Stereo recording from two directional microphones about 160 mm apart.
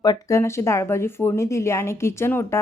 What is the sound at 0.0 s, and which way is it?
Speech, 20° left (ahead or behind).